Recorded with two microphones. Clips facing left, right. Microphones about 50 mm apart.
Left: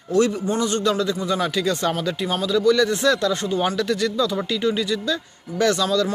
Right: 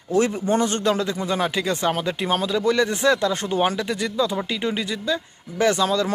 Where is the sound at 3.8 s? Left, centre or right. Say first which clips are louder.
Left 2 dB; centre.